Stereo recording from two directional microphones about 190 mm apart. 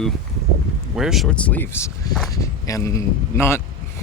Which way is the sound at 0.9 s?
Centre (ahead or behind).